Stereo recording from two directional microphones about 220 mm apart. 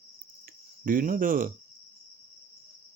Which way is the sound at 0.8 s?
40° right (ahead or behind).